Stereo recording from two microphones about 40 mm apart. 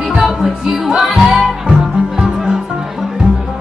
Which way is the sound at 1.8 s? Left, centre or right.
Centre.